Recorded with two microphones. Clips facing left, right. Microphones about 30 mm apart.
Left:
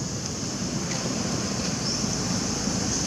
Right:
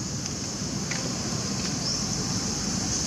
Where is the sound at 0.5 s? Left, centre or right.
Centre.